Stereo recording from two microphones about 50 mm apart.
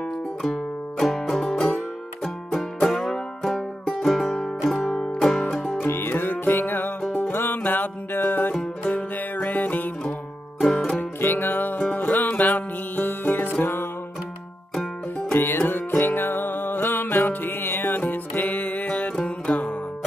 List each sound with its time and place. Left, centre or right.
0.4 s music: centre
5.9 s music: left
11.0 s music: left
15.3 s music: left